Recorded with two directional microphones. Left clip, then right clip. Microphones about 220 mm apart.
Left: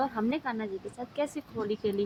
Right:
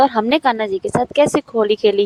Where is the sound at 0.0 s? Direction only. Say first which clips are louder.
Right 17 dB; 45° right (ahead or behind).